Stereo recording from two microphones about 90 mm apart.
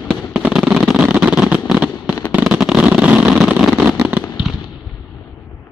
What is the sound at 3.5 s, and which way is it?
Vehicle, 5° right (ahead or behind).